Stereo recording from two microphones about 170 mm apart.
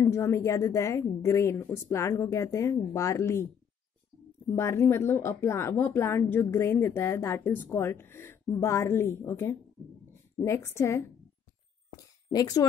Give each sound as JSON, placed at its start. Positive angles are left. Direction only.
{"t": 0.0, "sound": "speech", "side_deg": 15}
{"t": 4.5, "sound": "speech", "side_deg": 15}
{"t": 12.0, "sound": "a sound", "side_deg": 20}